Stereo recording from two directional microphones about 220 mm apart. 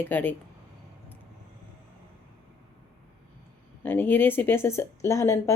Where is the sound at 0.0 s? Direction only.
10° left (ahead or behind).